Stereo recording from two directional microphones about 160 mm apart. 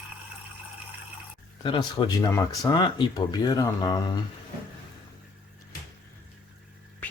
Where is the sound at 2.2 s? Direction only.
20° left (ahead or behind).